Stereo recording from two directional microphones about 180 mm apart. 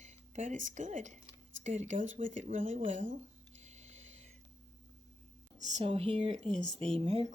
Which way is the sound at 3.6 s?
40° right (ahead or behind).